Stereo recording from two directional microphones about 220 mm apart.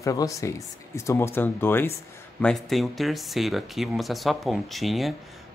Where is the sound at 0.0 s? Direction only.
15° left (ahead or behind).